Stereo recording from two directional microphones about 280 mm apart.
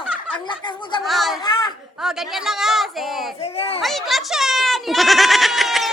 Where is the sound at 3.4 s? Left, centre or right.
Left.